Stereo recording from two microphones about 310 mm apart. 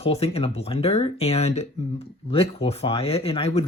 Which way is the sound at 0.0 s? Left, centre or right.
Centre.